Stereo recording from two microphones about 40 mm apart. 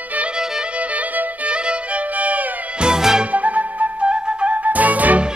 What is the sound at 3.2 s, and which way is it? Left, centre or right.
Flute, right.